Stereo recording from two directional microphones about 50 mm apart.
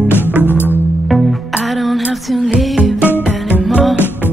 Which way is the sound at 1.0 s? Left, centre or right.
Centre.